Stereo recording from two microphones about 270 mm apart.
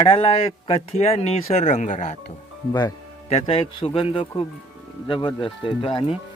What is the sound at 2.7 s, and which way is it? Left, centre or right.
A man's voice, centre.